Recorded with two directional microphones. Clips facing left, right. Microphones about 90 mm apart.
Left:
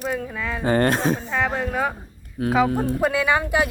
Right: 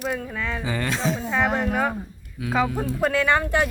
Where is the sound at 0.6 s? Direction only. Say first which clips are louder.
Left 10 dB; 50° left (ahead or behind).